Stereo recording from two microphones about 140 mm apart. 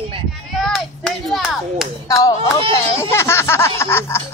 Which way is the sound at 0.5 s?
Centre (ahead or behind).